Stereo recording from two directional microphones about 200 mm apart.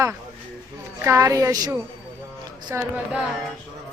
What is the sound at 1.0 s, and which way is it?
A woman's voice, 15° right (ahead or behind).